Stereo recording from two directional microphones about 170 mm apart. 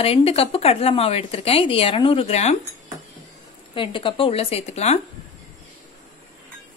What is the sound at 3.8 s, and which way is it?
Speech, 30° left (ahead or behind).